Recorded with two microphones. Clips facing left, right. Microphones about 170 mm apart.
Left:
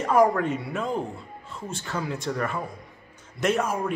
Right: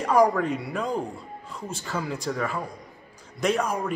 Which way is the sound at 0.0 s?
Centre (ahead or behind).